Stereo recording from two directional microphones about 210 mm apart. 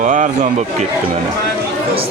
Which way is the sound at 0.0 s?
35° right (ahead or behind).